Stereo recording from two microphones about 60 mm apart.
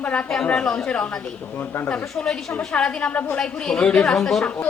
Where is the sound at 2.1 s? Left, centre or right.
Centre.